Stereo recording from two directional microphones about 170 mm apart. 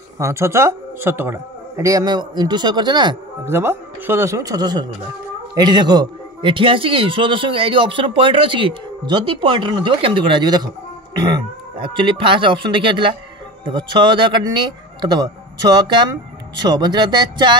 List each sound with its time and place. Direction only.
0.2 s speech: 15° right (ahead or behind)
3.4 s speech: 15° right (ahead or behind)